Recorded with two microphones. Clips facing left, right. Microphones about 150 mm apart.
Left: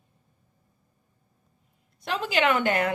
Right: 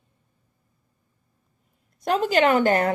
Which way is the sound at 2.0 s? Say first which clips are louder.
Right 5 dB; 45° right (ahead or behind).